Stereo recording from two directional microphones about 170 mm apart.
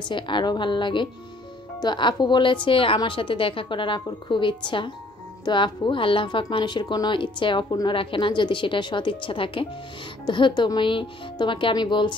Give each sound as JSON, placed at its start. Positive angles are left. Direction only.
{"t": 0.1, "sound": "speech", "side_deg": 30}